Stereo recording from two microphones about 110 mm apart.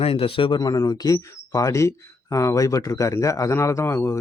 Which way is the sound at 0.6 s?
35° left (ahead or behind).